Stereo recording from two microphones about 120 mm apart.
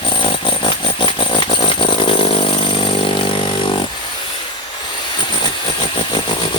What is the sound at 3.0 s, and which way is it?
Vehicle, 45° left (ahead or behind).